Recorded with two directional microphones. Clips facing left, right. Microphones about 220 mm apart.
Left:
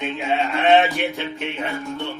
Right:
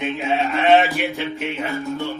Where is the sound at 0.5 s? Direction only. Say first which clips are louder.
Even; centre (ahead or behind).